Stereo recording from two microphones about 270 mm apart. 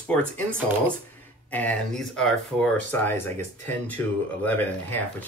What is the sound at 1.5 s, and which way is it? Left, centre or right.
Speech, centre.